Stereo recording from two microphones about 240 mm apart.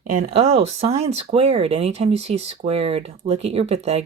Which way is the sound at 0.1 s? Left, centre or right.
Right.